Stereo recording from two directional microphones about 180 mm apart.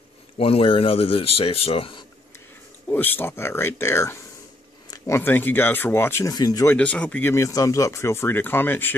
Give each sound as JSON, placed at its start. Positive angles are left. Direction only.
{"t": 0.4, "sound": "speech", "side_deg": 30}
{"t": 2.9, "sound": "speech", "side_deg": 10}